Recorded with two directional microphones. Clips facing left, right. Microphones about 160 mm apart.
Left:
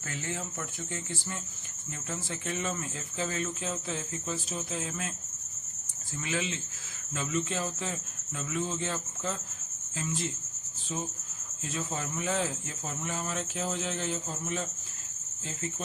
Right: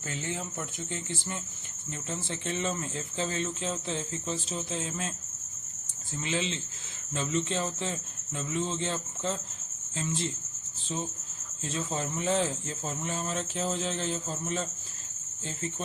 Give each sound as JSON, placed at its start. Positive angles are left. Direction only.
{"t": 2.0, "sound": "speech", "side_deg": -25}
{"t": 6.2, "sound": "speech", "side_deg": -25}
{"t": 11.7, "sound": "speech", "side_deg": -30}